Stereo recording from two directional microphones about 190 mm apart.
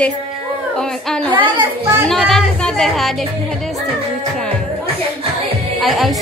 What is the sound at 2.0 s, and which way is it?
A woman's voice, centre (ahead or behind).